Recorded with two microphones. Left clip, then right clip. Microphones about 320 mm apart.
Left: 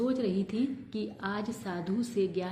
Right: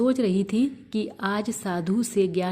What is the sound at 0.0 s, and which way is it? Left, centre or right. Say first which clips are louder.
A woman's voice: right 7 dB; right.